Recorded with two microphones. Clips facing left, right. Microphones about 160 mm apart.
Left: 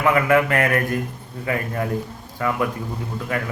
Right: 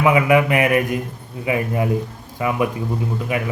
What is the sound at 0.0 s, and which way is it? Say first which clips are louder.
Speech: right 2 dB; 15° right (ahead or behind).